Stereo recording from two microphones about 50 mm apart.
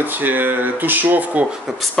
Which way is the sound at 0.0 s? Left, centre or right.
Right.